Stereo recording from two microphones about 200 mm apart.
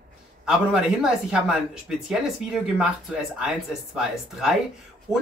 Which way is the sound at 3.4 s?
5° right (ahead or behind).